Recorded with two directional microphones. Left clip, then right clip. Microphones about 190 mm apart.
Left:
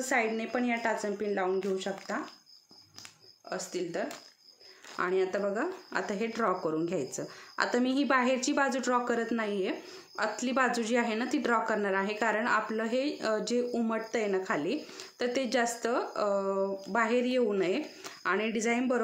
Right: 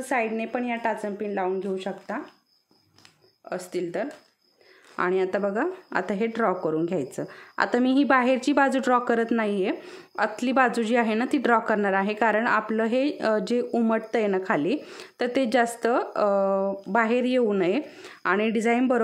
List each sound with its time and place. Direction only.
0.0 s a woman's voice: 35° right (ahead or behind)
3.4 s speech: 45° right (ahead or behind)